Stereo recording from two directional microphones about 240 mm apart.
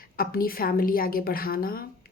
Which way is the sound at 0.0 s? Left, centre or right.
Left.